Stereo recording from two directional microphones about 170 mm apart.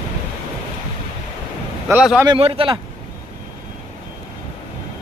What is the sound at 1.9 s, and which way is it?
Speech, 10° right (ahead or behind).